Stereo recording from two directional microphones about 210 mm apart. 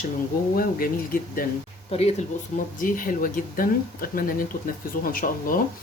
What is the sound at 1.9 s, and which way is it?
Speech, 30° left (ahead or behind).